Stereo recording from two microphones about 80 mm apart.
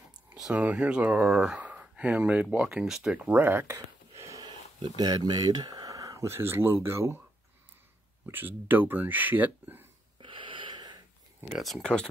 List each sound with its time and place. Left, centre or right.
0.5 s speech: centre
3.3 s speech: right
3.6 s gasp: right
4.4 s a sound: right
6.2 s speech: right
8.3 s speech: right
10.2 s wheeze: right
11.5 s speech: centre